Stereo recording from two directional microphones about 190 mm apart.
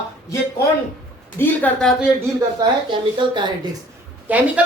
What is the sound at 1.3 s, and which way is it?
Speech, 10° left (ahead or behind).